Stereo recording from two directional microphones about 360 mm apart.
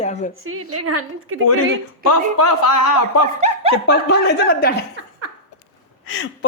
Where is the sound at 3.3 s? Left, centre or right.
Centre.